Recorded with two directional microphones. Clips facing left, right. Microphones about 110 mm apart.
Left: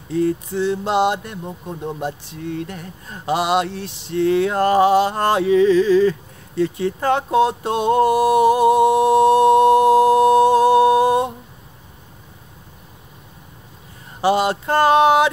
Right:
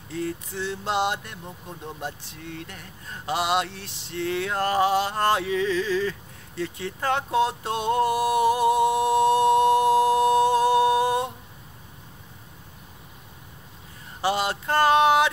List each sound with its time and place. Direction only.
0.2 s mantra: 20° left (ahead or behind)
1.4 s speech: 55° left (ahead or behind)
2.5 s speech: 30° left (ahead or behind)
3.3 s mantra: 20° left (ahead or behind)
6.6 s speech: 30° left (ahead or behind)
7.7 s music: 25° left (ahead or behind)
14.2 s a sound: 20° left (ahead or behind)